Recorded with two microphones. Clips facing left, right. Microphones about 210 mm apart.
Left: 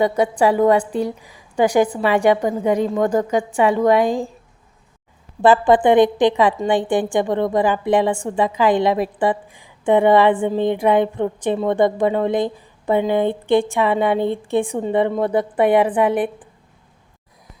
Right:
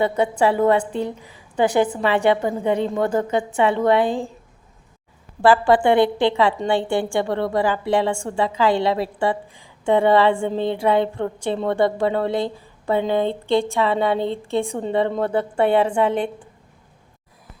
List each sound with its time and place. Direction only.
0.0 s a woman's voice: 15° left (ahead or behind)
5.4 s a woman's voice: 20° left (ahead or behind)